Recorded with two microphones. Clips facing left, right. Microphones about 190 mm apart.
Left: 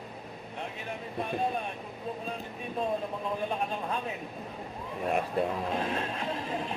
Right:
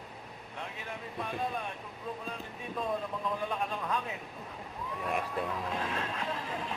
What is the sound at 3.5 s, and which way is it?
Speech, 30° left (ahead or behind).